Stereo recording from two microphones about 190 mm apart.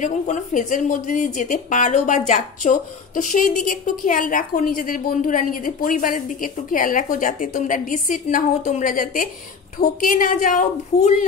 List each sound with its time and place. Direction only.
0.0 s speech: 40° left (ahead or behind)